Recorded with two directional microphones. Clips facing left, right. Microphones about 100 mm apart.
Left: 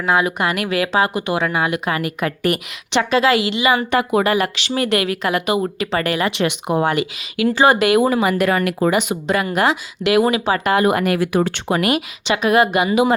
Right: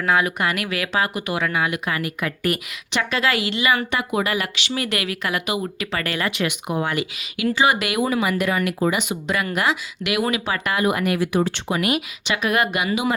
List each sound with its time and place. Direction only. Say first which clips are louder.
0.0 s speech: left 3 dB; 25° left (ahead or behind)
6.1 s speech: left 3 dB; 20° left (ahead or behind); by 8.4 s 35° left (ahead or behind)
8.4 s speech: left 4 dB; 60° left (ahead or behind)
8.9 s speech: left 5 dB; 40° left (ahead or behind)
10.8 s speech: left 1 dB; 55° left (ahead or behind)
12.3 s speech: left 6 dB; 25° left (ahead or behind)